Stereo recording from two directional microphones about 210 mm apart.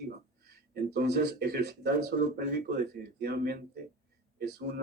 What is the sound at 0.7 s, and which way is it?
Speech, 50° right (ahead or behind).